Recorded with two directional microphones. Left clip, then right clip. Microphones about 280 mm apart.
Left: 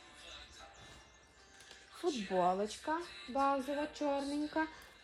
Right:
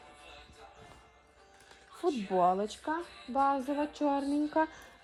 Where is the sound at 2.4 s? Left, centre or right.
Centre.